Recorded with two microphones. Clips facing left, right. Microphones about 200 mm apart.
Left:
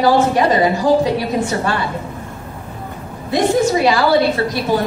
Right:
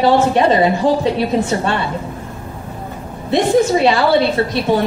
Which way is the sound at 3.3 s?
25° right (ahead or behind).